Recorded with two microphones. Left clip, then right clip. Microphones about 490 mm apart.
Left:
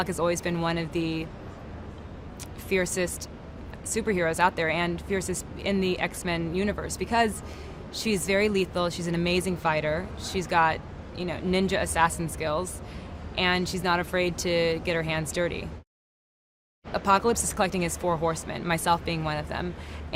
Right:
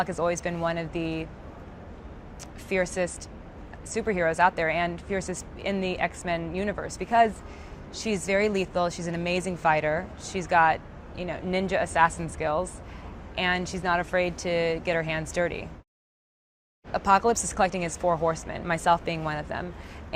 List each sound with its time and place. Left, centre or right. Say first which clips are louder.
0.0 s speech: even; centre
2.6 s speech: even; centre
16.9 s speech: right 1 dB; right